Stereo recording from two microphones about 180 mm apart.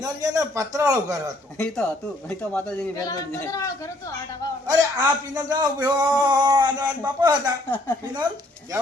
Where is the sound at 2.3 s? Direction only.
10° left (ahead or behind).